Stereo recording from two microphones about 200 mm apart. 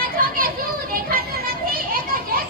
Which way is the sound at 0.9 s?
50° right (ahead or behind).